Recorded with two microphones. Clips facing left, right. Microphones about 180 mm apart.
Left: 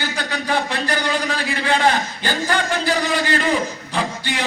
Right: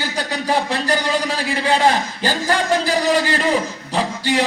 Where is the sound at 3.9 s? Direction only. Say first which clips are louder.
Right 4 dB; 35° right (ahead or behind).